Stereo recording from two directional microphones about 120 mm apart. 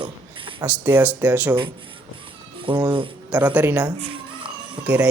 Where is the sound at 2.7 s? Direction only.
40° right (ahead or behind).